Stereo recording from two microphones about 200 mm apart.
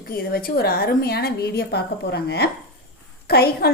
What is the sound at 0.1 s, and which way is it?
A woman's voice, 50° left (ahead or behind).